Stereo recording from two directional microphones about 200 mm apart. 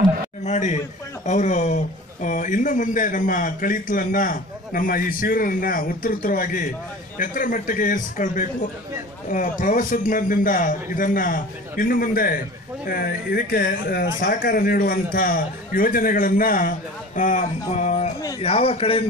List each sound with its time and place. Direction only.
0.5 s a man's voice: 35° left (ahead or behind)